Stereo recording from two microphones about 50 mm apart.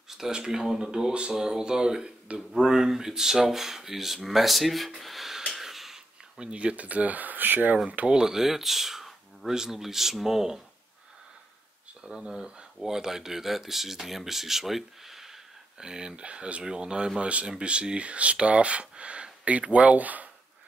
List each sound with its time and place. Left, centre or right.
0.2 s speech: centre
5.6 s a sound: centre
6.4 s speech: right
8.1 s speech: centre
12.0 s speech: centre; by 20.2 s right